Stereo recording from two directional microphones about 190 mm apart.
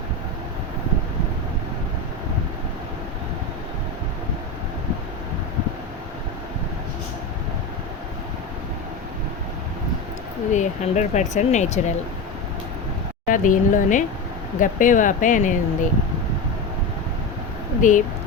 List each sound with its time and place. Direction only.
10.5 s speech: 40° left (ahead or behind)
13.2 s speech: 45° left (ahead or behind)
17.7 s speech: 40° left (ahead or behind)